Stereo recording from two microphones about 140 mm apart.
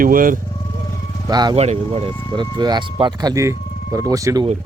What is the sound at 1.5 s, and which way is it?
Speech, 45° right (ahead or behind).